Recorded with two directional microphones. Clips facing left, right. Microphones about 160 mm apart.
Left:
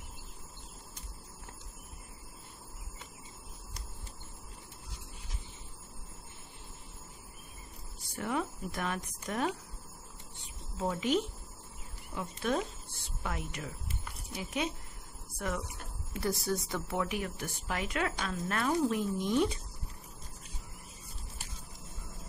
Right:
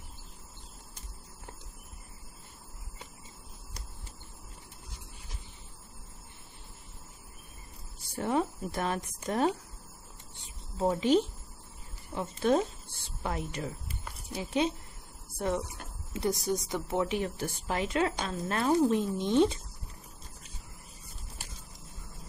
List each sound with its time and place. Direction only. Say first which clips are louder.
8.2 s a woman's voice: right 5 dB; 30° right (ahead or behind)
10.8 s a woman's voice: right 5 dB; 30° right (ahead or behind)